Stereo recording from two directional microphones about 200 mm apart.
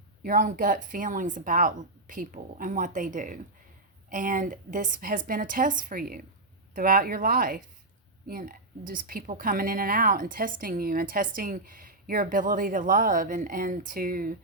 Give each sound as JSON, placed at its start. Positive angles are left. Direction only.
{"t": 0.2, "sound": "a woman's voice", "side_deg": -45}